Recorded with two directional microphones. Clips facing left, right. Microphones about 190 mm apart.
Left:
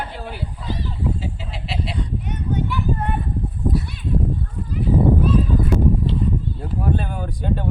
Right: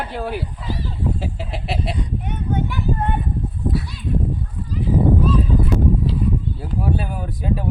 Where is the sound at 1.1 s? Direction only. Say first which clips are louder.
Right 2 dB; 55° right (ahead or behind).